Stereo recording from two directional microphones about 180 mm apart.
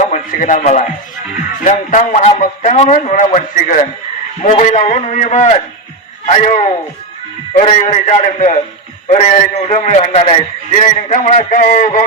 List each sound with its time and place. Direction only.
0.0 s a man's voice: 45° left (ahead or behind)